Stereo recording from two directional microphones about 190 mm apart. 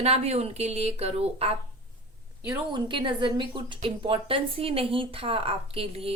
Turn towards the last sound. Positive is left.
turn(degrees=-30)  # may be behind; listen again after turning